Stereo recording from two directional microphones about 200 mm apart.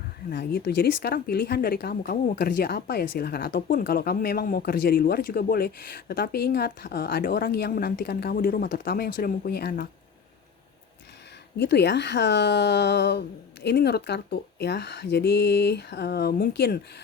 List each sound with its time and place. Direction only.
0.3 s speech: 55° left (ahead or behind)
11.5 s speech: 55° left (ahead or behind)